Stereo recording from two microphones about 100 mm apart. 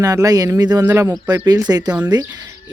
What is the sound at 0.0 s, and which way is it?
Speech, 35° right (ahead or behind).